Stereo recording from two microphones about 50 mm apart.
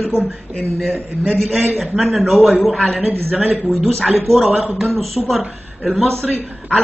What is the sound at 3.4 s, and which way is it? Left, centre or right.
Speech, right.